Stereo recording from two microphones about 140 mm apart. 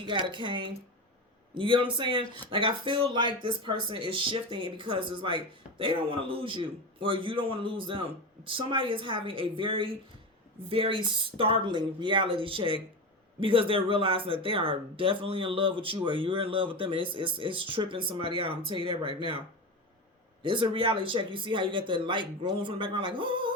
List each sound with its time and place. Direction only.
0.0 s speech: 35° right (ahead or behind)
20.4 s speech: 35° right (ahead or behind)